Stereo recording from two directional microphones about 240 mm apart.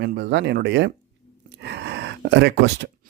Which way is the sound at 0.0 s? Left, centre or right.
Right.